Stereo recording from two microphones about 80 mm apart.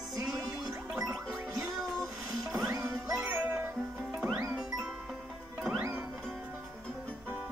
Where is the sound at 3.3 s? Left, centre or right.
Right.